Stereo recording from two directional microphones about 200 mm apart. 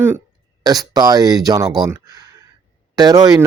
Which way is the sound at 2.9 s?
20° right (ahead or behind).